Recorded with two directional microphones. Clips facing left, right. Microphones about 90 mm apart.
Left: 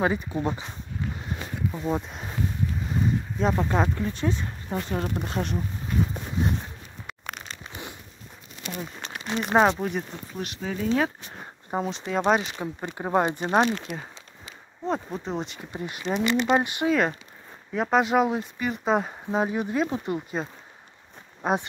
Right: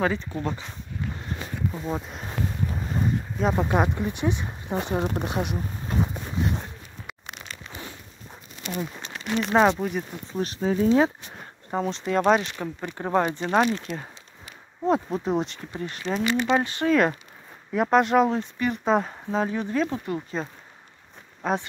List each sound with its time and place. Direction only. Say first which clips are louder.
0.0 s speech: left 1 dB; 15° left (ahead or behind)
1.7 s speech: left 2 dB; centre (ahead or behind)
3.0 s a sound: even; centre (ahead or behind)
3.5 s speech: right 1 dB; 10° right (ahead or behind)
9.1 s speech: even; 10° left (ahead or behind)
10.3 s speech: right 7 dB; 35° right (ahead or behind)
11.7 s speech: right 2 dB; 5° left (ahead or behind); by 13.7 s 20° left (ahead or behind)
13.7 s speech: right 1 dB; 5° left (ahead or behind)
17.7 s speech: right 2 dB; centre (ahead or behind); by 20.3 s 15° left (ahead or behind)
21.4 s speech: left 1 dB; 15° left (ahead or behind)